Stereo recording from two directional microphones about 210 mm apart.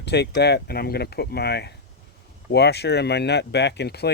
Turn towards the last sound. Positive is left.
turn(degrees=50)  # may be behind; listen again after turning